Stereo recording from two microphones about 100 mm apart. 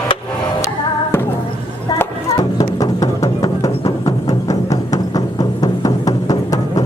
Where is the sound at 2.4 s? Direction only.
35° left (ahead or behind).